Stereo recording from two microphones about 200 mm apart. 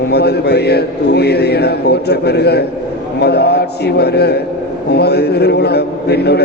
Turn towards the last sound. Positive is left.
turn(degrees=55)  # may be behind; listen again after turning